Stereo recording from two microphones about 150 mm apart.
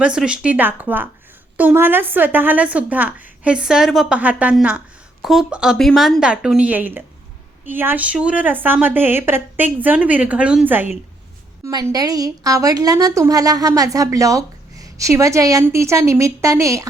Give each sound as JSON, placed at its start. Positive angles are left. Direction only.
{"t": 0.0, "sound": "a woman's voice", "side_deg": -5}
{"t": 11.6, "sound": "a woman's voice", "side_deg": -25}